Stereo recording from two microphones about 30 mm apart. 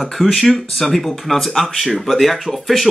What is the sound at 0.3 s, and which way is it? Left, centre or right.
Speech, centre.